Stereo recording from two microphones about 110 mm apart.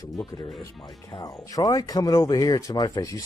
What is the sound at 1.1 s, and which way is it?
Speech, 35° left (ahead or behind).